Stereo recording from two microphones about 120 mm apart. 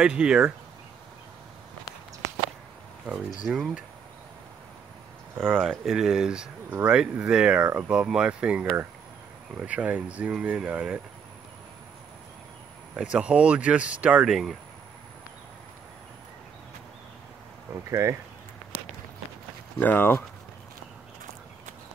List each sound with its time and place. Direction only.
0.0 s speech: 10° right (ahead or behind)
3.4 s speech: centre (ahead or behind)
5.4 s speech: 5° left (ahead or behind)
12.9 s speech: 10° right (ahead or behind)
17.8 s speech: 25° right (ahead or behind)
19.8 s speech: 15° left (ahead or behind)